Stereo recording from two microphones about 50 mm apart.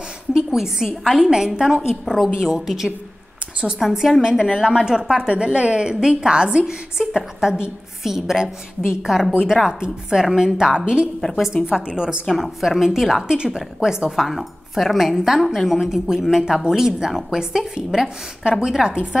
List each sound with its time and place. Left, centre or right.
0.3 s a woman's voice: centre
11.1 s a woman's voice: centre
11.7 s a woman's voice: centre
12.4 s a woman's voice: centre
14.2 s a woman's voice: centre